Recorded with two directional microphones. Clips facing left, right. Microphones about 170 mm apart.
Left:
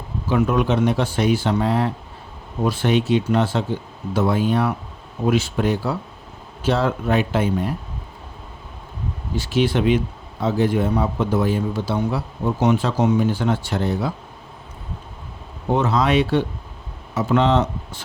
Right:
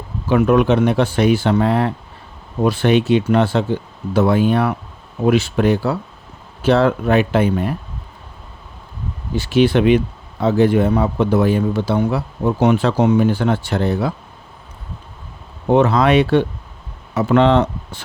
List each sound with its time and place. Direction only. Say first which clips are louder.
0.3 s speech: right 5 dB; 65° right (ahead or behind)
9.3 s speech: right 6 dB; 65° right (ahead or behind)
15.7 s speech: right 5 dB; 65° right (ahead or behind)